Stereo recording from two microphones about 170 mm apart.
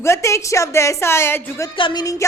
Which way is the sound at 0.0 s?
15° left (ahead or behind).